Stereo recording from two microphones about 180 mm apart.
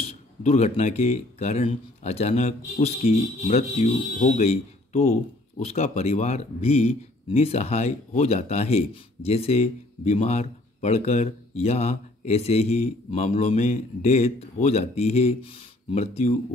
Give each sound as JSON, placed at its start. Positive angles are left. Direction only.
{"t": 0.0, "sound": "speech", "side_deg": 35}